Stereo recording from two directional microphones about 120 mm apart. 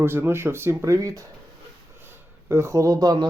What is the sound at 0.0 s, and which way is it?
Speech, 20° right (ahead or behind).